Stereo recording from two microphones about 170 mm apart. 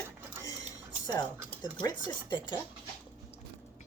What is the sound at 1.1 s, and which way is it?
Speech, 25° left (ahead or behind).